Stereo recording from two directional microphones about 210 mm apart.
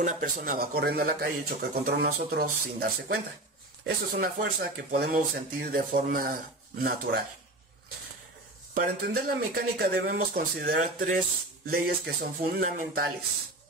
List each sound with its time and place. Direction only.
0.0 s speech: 40° right (ahead or behind)
8.7 s speech: 45° right (ahead or behind)